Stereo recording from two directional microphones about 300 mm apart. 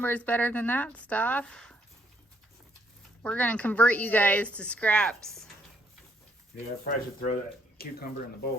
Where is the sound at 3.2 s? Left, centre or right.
Centre.